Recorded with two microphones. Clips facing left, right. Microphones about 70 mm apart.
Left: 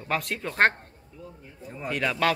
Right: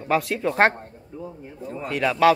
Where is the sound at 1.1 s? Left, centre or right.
Right.